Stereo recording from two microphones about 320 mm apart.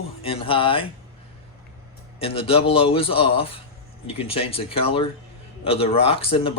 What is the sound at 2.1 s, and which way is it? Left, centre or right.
Speech, centre.